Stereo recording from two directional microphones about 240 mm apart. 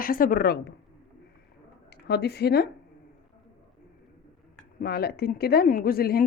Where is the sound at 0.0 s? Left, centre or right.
Left.